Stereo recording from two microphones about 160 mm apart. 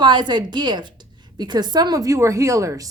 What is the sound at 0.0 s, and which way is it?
A woman's voice, 30° right (ahead or behind).